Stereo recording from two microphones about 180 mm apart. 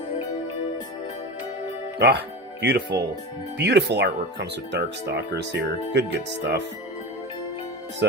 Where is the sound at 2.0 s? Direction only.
65° right (ahead or behind).